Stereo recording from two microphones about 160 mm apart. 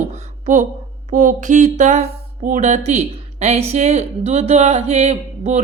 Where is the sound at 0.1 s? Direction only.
50° right (ahead or behind).